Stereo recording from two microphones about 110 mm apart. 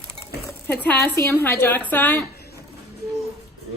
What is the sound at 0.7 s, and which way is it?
A woman's voice, 15° left (ahead or behind).